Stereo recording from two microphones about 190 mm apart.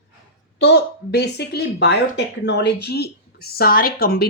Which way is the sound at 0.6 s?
60° left (ahead or behind).